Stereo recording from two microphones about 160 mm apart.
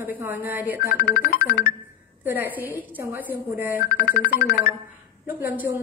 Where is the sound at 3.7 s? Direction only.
60° left (ahead or behind).